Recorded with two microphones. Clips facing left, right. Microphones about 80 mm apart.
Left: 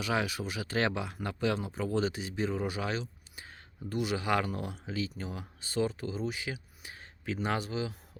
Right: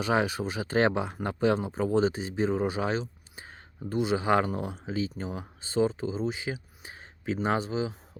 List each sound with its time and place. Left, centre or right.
0.0 s speech: right